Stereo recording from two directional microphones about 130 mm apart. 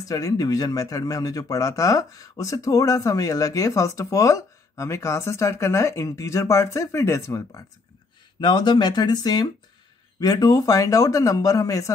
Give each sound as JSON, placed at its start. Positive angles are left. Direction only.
{"t": 0.1, "sound": "a man's voice", "side_deg": 25}
{"t": 8.4, "sound": "a man's voice", "side_deg": 35}